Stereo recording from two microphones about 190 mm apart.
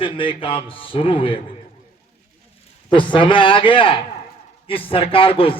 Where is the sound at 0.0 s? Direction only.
25° left (ahead or behind).